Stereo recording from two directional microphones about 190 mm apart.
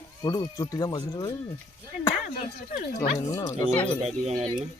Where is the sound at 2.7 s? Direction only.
40° left (ahead or behind).